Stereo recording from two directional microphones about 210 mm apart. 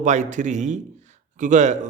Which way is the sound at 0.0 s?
35° right (ahead or behind).